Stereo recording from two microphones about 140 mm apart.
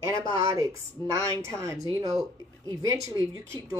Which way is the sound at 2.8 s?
25° right (ahead or behind).